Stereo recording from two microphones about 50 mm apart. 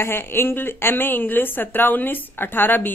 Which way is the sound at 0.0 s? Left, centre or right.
Left.